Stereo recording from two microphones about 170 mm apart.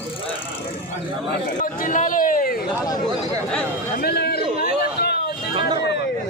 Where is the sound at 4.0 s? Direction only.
70° left (ahead or behind).